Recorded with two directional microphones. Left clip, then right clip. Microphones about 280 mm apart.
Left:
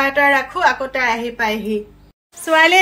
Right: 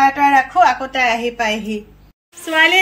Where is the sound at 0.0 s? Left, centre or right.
Left.